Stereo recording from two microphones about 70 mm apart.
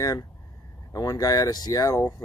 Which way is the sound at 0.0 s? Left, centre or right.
Left.